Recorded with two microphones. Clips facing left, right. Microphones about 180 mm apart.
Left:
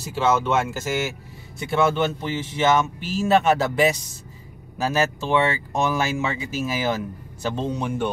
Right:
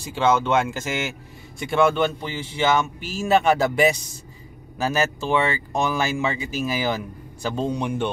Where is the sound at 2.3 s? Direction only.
30° right (ahead or behind).